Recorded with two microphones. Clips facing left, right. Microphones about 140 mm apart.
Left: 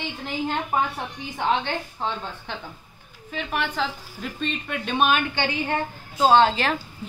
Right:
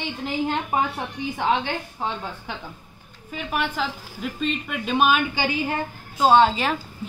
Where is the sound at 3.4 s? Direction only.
5° right (ahead or behind).